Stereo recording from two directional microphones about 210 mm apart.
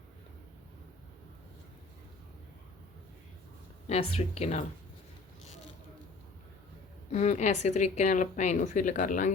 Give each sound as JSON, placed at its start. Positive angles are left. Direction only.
{"t": 3.8, "sound": "a woman's voice", "side_deg": 30}
{"t": 7.1, "sound": "a woman's voice", "side_deg": 35}